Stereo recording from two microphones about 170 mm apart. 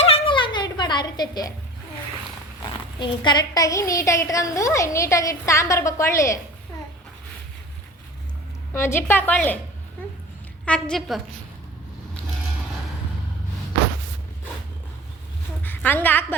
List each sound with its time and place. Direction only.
0.0 s a sound: 30° left (ahead or behind)
3.0 s a woman's voice: 25° left (ahead or behind)
8.7 s a woman's voice: 15° left (ahead or behind)
10.7 s a woman's voice: 5° left (ahead or behind)
15.6 s a woman's voice: 10° left (ahead or behind)